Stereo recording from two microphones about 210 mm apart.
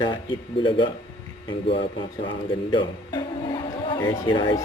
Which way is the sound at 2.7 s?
20° left (ahead or behind).